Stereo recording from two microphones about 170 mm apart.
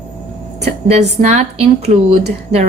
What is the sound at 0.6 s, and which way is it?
A woman's voice, 40° right (ahead or behind).